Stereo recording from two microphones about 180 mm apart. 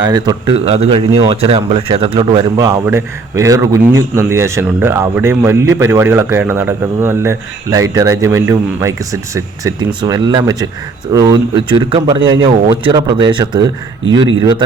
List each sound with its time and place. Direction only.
0.1 s speech: 25° right (ahead or behind)